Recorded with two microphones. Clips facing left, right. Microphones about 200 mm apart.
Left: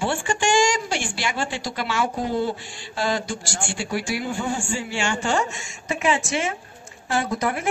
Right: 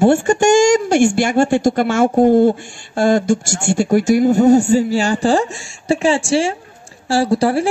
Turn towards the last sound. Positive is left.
turn(degrees=-30)  # may be behind; listen again after turning